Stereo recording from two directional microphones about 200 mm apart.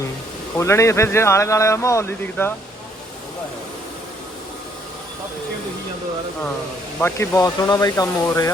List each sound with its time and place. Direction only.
0.5 s speech: 15° left (ahead or behind)
7.0 s speech: 15° left (ahead or behind)